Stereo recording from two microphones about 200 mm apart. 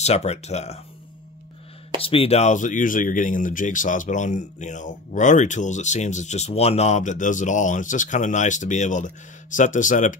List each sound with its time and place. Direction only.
0.0 s speech: 35° left (ahead or behind)
2.0 s speech: 30° left (ahead or behind)